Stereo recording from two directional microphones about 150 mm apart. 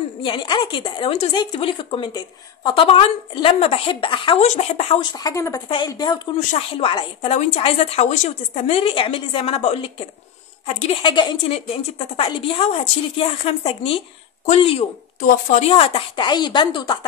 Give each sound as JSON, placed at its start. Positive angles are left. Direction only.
{"t": 0.2, "sound": "a woman's voice", "side_deg": 35}
{"t": 5.2, "sound": "a woman's voice", "side_deg": 25}